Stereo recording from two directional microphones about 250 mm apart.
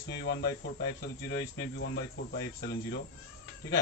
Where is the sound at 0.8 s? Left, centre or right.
Left.